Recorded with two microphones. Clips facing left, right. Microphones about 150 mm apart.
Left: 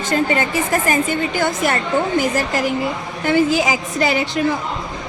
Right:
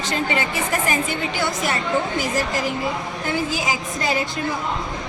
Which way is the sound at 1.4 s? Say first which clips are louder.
Left 4 dB; 55° left (ahead or behind).